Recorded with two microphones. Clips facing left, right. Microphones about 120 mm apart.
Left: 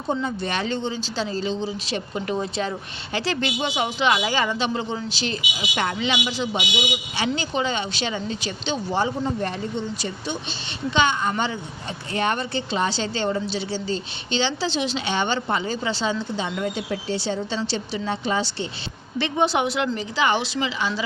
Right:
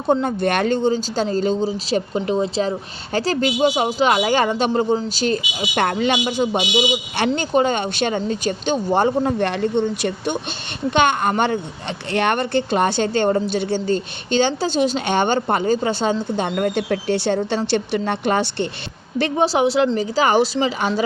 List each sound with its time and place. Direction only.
0.1 s speech: 55° right (ahead or behind); by 2.0 s 40° right (ahead or behind)
2.1 s speech: 25° right (ahead or behind); by 9.3 s 55° right (ahead or behind)
9.4 s speech: 70° right (ahead or behind); by 11.6 s 55° right (ahead or behind)
12.1 s speech: 65° right (ahead or behind)
19.2 s a woman's voice: 35° right (ahead or behind)